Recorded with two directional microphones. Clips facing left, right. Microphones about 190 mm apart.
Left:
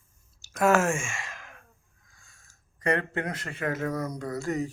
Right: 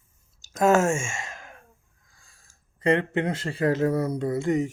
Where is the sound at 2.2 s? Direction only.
35° right (ahead or behind).